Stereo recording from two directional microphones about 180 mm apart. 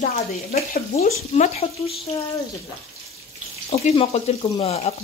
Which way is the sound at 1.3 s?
35° left (ahead or behind).